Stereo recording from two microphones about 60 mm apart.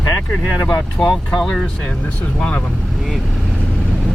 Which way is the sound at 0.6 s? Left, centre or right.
Centre.